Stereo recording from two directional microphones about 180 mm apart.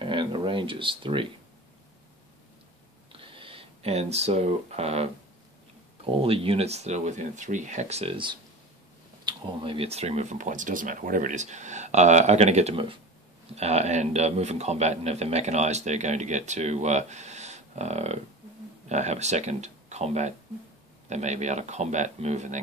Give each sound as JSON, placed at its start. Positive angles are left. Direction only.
{"t": 0.0, "sound": "speech", "side_deg": -25}
{"t": 3.1, "sound": "a sound", "side_deg": -30}
{"t": 6.0, "sound": "a man's voice", "side_deg": -30}